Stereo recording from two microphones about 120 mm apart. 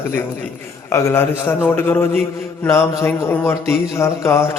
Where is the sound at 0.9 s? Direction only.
20° left (ahead or behind).